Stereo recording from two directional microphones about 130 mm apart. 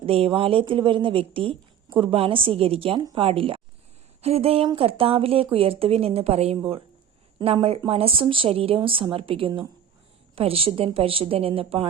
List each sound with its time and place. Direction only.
0.0 s speech: 45° right (ahead or behind)